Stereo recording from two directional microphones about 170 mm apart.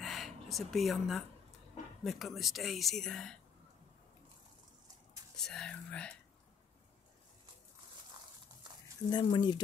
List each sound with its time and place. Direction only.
0.0 s a sound: centre (ahead or behind)
2.0 s speech: centre (ahead or behind)
5.4 s speech: 5° left (ahead or behind)
9.1 s speech: 25° left (ahead or behind)